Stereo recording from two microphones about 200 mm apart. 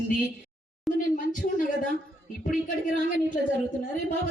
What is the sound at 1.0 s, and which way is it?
Speech, 40° left (ahead or behind).